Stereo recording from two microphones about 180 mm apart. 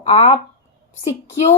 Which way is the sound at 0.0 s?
30° left (ahead or behind).